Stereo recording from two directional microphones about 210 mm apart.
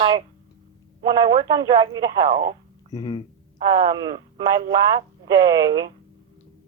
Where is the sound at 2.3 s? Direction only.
40° right (ahead or behind).